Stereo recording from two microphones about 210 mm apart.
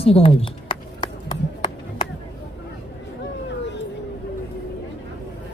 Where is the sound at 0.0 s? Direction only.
25° left (ahead or behind).